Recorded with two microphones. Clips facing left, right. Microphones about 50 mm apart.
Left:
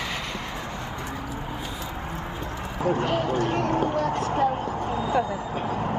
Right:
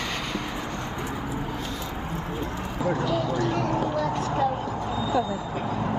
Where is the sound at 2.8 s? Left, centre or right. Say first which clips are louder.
Left 1 dB; left.